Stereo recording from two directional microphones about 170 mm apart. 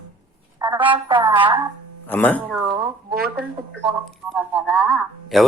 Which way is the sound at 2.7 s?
25° right (ahead or behind).